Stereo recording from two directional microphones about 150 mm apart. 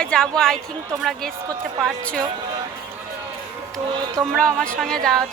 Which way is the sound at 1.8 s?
5° left (ahead or behind).